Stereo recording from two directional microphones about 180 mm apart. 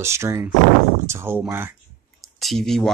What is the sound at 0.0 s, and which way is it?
Speech, 15° right (ahead or behind).